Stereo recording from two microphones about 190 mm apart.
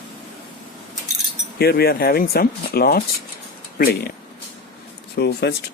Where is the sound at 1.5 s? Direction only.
55° left (ahead or behind).